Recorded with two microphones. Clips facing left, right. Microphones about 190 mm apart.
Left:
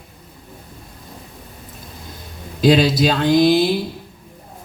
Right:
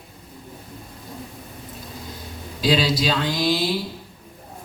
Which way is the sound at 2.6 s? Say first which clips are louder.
Left 7 dB; 50° left (ahead or behind).